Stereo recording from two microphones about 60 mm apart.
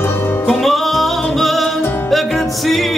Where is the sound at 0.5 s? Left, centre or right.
Centre.